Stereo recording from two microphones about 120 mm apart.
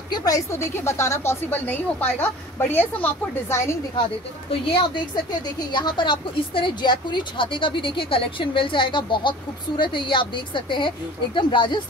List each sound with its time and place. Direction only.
0.1 s a woman's voice: 30° left (ahead or behind)
4.5 s speech: 45° left (ahead or behind)